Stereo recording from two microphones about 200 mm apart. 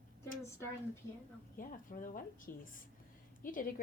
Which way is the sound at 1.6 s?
45° left (ahead or behind).